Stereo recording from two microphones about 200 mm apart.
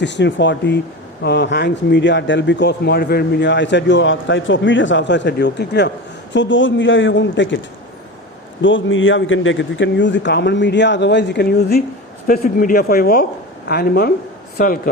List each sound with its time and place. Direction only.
0.0 s a woman's voice: 60° left (ahead or behind)
8.6 s speech: 70° left (ahead or behind); by 14.1 s 50° left (ahead or behind)